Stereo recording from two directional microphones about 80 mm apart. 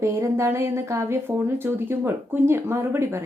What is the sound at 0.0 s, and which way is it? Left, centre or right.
A woman's voice, right.